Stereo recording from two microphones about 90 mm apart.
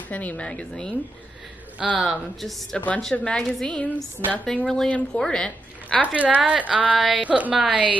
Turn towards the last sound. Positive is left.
turn(degrees=-10)  # may be behind; listen again after turning